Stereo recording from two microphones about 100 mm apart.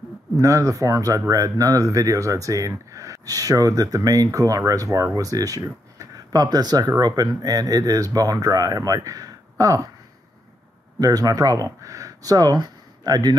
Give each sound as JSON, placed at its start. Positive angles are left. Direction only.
{"t": 0.4, "sound": "speech", "side_deg": -30}
{"t": 11.0, "sound": "speech", "side_deg": -40}